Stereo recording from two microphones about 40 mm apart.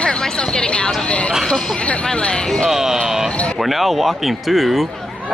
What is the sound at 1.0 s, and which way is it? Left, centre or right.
Speech, left.